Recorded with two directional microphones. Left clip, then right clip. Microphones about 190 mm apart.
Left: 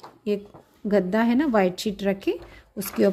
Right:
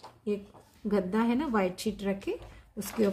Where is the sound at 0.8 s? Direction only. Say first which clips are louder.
Left 7 dB; 35° left (ahead or behind).